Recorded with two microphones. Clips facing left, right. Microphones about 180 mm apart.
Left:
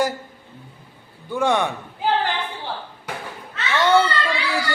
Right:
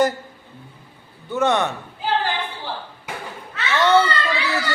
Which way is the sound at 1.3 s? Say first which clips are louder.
Right 1 dB; 10° left (ahead or behind).